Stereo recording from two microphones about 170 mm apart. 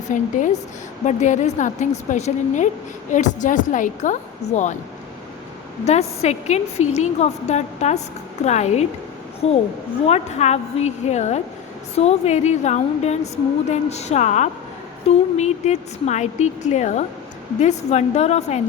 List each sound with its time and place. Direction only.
0.1 s a woman's voice: 45° left (ahead or behind)
5.8 s a woman's voice: 40° left (ahead or behind)